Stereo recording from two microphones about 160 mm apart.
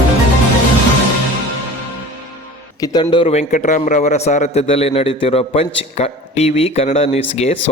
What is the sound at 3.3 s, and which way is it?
A man's voice, 50° left (ahead or behind).